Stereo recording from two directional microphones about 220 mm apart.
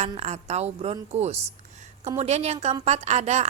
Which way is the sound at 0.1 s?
30° right (ahead or behind).